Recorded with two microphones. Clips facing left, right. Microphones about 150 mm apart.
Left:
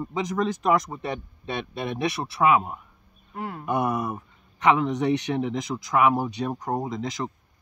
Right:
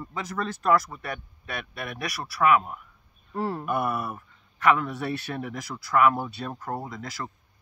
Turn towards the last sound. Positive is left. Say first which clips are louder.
# left 6 dB
turn(degrees=20)  # may be behind; listen again after turning